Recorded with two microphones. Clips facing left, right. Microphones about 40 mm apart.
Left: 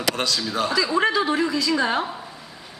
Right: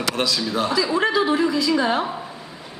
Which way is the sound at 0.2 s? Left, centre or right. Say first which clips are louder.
Right 2 dB; centre.